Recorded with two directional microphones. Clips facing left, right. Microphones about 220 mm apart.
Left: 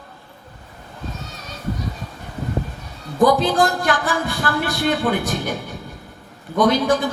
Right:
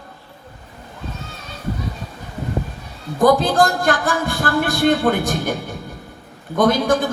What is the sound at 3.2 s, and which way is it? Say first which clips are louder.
Speech: right 2 dB; 45° right (ahead or behind).